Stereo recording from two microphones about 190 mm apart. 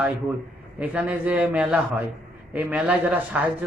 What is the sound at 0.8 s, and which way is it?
A man's voice, 5° right (ahead or behind).